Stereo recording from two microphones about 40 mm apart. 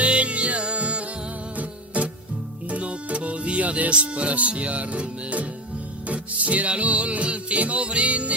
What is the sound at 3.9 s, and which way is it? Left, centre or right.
Speech, right.